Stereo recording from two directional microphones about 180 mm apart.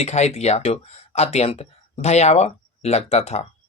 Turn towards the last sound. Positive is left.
turn(degrees=35)  # may be behind; listen again after turning